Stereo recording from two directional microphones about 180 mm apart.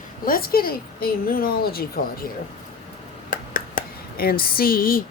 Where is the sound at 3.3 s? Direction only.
50° left (ahead or behind).